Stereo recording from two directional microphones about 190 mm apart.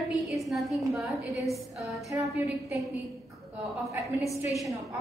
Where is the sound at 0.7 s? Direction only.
15° right (ahead or behind).